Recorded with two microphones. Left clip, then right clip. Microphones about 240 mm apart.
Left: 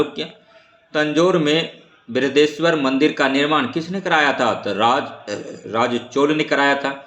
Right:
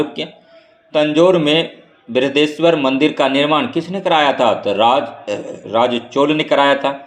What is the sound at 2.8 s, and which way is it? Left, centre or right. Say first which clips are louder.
Speech: right 3 dB; right.